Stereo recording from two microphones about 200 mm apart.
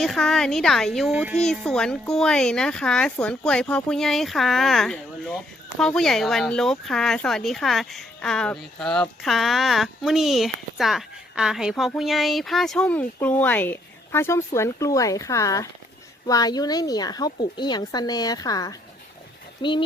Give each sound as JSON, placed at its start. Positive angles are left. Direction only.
{"t": 0.0, "sound": "a woman's voice", "side_deg": 0}